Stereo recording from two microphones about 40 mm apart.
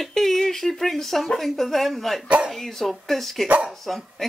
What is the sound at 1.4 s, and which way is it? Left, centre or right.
Speech, centre.